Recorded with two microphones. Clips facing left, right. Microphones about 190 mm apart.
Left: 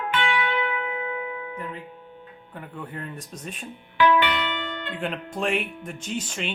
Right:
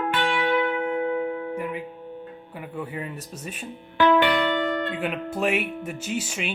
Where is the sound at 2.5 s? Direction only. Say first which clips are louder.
Right 3 dB; 10° right (ahead or behind).